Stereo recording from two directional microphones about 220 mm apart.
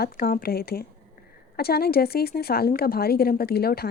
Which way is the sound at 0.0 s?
45° left (ahead or behind).